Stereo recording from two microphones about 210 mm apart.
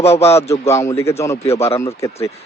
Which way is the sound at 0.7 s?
15° left (ahead or behind).